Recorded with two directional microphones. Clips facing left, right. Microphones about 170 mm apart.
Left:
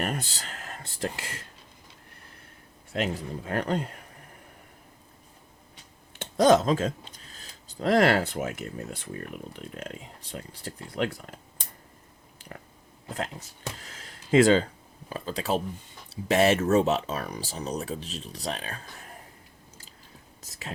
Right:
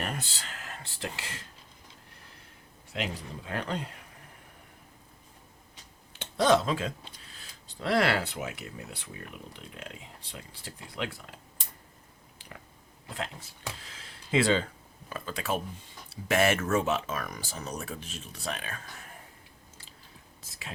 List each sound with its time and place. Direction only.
0.0 s a sound: 40° left (ahead or behind)
2.9 s speech: 45° left (ahead or behind)
6.1 s speech: 40° left (ahead or behind)
12.4 s chewing: 45° left (ahead or behind)
13.7 s a sound: 45° left (ahead or behind)
15.1 s speech: 35° left (ahead or behind)